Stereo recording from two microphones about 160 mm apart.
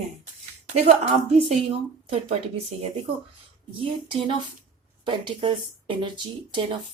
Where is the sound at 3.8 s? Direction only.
35° right (ahead or behind).